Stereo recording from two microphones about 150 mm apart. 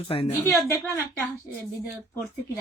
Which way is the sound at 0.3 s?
15° left (ahead or behind).